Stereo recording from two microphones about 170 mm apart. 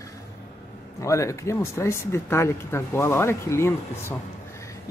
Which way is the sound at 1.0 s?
20° left (ahead or behind).